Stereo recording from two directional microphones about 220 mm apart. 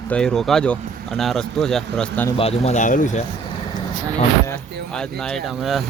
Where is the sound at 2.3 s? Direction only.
25° left (ahead or behind).